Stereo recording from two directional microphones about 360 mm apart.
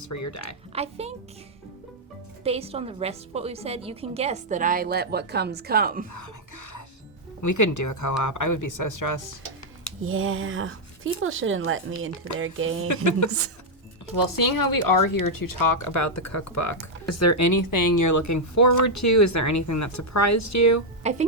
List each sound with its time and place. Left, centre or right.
0.0 s speech: left
0.7 s a woman's voice: centre
2.4 s a woman's voice: centre
6.1 s whispering: left
7.4 s speech: left
10.0 s speech: right
12.9 s speech: left
14.2 s speech: left
21.0 s speech: centre